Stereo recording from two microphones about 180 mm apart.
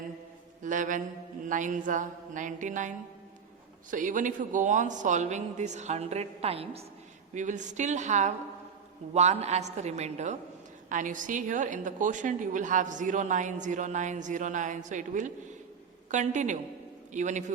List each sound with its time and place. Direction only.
0.6 s mantra: 45° right (ahead or behind)
1.5 s a woman's voice: 45° right (ahead or behind)
3.9 s a man's voice: 45° right (ahead or behind)
7.3 s a woman's voice: 45° right (ahead or behind)